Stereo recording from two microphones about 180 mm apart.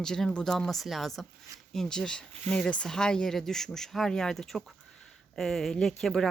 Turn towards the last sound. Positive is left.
turn(degrees=0)  # may be behind; listen again after turning